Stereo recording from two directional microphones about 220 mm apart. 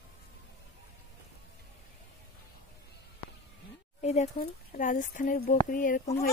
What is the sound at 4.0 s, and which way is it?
Speech, 30° left (ahead or behind).